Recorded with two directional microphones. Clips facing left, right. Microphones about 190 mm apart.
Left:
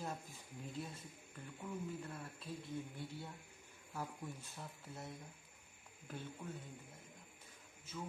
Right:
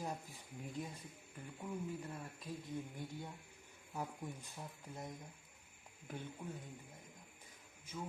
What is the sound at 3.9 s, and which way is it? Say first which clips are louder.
Speech: right 2 dB; 15° right (ahead or behind).